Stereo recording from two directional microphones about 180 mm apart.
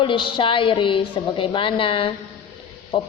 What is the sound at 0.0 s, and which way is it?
A woman's voice, 25° left (ahead or behind).